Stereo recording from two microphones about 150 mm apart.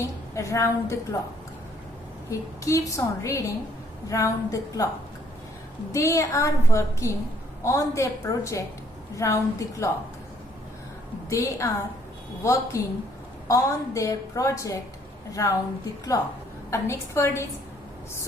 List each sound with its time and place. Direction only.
0.0 s a woman's voice: 20° left (ahead or behind)
2.3 s a woman's voice: 20° left (ahead or behind)
5.9 s a woman's voice: 20° left (ahead or behind)
11.3 s a woman's voice: 20° left (ahead or behind)